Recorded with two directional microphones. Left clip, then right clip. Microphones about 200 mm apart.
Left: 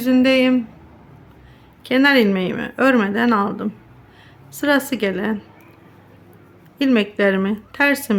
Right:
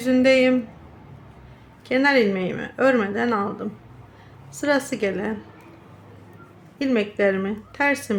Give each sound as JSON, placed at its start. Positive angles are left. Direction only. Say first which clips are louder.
{"t": 0.0, "sound": "speech", "louder": "left 1 dB", "side_deg": 15}
{"t": 1.8, "sound": "speech", "louder": "left 3 dB", "side_deg": 20}
{"t": 6.7, "sound": "speech", "louder": "left 4 dB", "side_deg": 25}